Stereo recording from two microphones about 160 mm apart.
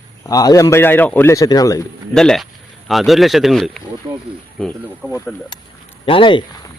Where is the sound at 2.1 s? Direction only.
5° left (ahead or behind).